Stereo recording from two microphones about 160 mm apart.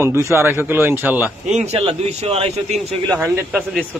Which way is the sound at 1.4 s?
45° right (ahead or behind).